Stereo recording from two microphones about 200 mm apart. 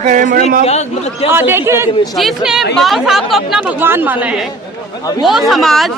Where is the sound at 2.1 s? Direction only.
Centre (ahead or behind).